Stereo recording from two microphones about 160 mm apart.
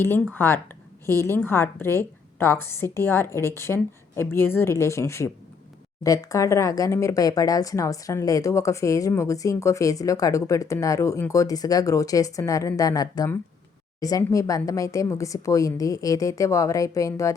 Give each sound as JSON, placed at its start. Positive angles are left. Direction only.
{"t": 0.0, "sound": "a woman's voice", "side_deg": 15}